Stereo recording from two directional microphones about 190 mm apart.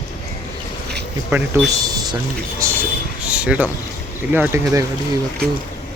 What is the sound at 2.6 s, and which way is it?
Speech, 15° right (ahead or behind).